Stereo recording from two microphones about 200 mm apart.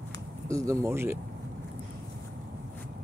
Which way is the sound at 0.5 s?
15° right (ahead or behind).